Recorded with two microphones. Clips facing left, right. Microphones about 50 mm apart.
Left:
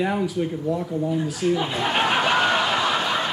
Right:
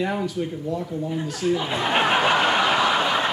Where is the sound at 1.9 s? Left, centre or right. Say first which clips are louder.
Right 2 dB; centre.